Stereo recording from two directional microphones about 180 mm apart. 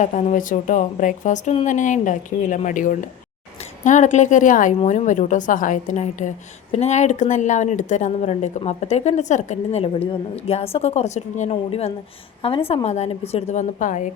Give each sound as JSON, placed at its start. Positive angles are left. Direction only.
{"t": 0.0, "sound": "a woman's voice", "side_deg": 40}